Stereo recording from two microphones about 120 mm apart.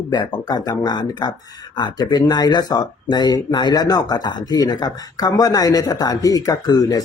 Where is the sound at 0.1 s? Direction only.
35° left (ahead or behind).